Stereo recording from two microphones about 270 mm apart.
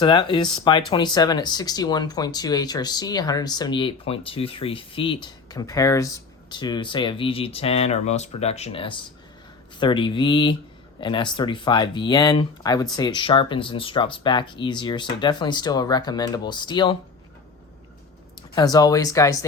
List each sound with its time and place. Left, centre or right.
0.0 s speech: centre
18.5 s speech: centre